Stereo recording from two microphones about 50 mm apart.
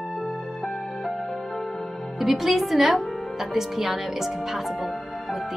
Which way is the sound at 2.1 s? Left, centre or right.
Centre.